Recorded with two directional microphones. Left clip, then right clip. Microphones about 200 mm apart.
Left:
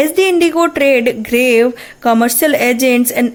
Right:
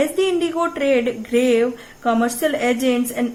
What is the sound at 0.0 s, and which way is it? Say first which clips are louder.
Speech: left 7 dB; 40° left (ahead or behind).